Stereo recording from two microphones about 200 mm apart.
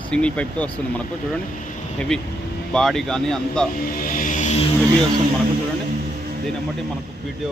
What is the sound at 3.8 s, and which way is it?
Music, 45° left (ahead or behind).